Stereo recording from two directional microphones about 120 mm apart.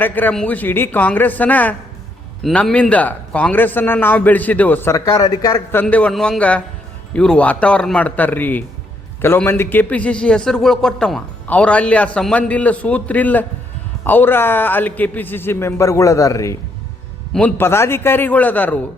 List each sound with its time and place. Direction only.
0.0 s a man's voice: 15° left (ahead or behind)
4.9 s speech: 30° left (ahead or behind)
5.8 s a man's voice: 10° left (ahead or behind); by 16.6 s 25° left (ahead or behind)
17.6 s a man's voice: 20° left (ahead or behind)